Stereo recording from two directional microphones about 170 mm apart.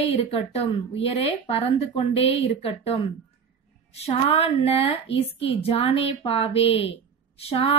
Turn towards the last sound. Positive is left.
turn(degrees=35)  # may be behind; listen again after turning